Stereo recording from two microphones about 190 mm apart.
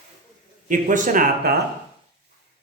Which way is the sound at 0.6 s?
40° right (ahead or behind).